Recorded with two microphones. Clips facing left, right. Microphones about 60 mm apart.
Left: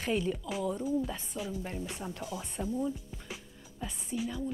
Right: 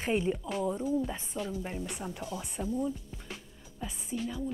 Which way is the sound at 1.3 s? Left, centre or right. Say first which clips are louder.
Right 2 dB; centre.